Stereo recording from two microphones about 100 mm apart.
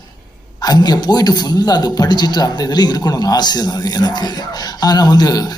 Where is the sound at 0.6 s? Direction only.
40° left (ahead or behind).